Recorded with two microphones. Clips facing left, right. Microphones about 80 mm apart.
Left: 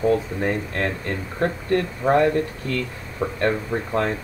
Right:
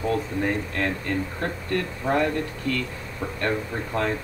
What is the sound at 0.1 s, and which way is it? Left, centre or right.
Speech, left.